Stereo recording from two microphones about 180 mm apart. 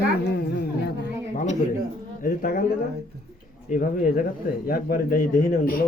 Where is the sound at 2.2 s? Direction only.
55° left (ahead or behind).